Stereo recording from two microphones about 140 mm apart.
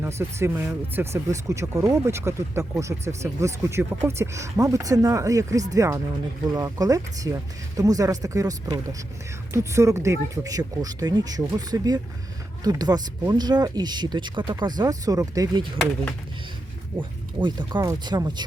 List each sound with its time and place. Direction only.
0.0 s speech: 20° right (ahead or behind)
17.0 s speech: 35° right (ahead or behind)